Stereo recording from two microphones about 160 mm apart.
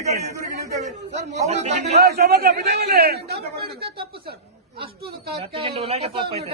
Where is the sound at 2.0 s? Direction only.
80° right.